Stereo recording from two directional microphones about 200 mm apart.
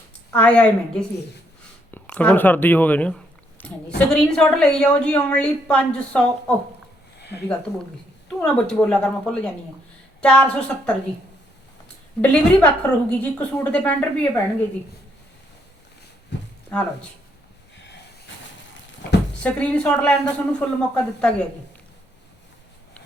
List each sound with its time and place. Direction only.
0.3 s a woman's voice: 5° left (ahead or behind)
7.2 s a sound: 55° left (ahead or behind)
8.4 s a woman's voice: 5° left (ahead or behind)
12.2 s a woman's voice: 5° left (ahead or behind)
16.6 s a woman's voice: 5° left (ahead or behind)
19.4 s speech: 5° left (ahead or behind)